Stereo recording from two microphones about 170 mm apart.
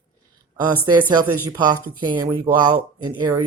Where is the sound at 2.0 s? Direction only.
25° right (ahead or behind).